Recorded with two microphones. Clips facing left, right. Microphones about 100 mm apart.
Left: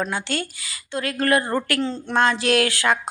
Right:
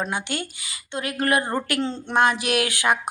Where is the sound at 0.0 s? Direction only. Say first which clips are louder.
Left 2 dB; 20° right (ahead or behind).